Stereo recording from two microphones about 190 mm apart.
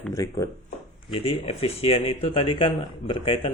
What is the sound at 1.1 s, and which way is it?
Speech, 30° left (ahead or behind).